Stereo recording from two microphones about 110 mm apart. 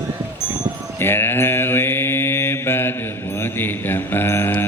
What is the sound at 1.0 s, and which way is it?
Mantra, 20° left (ahead or behind).